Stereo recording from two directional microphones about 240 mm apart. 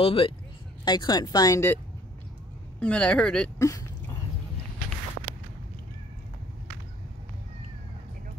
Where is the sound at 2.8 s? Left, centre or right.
Centre.